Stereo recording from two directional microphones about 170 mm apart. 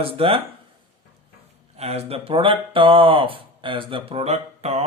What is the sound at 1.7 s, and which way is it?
Speech, 35° right (ahead or behind).